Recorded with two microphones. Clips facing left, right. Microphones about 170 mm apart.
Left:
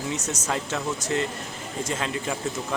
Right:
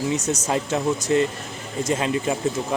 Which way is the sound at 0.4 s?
20° right (ahead or behind).